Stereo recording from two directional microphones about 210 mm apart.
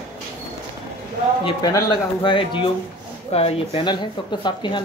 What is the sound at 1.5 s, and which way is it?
Speech, 20° left (ahead or behind).